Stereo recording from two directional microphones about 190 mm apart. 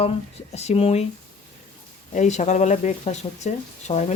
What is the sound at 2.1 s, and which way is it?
Speech, 40° left (ahead or behind).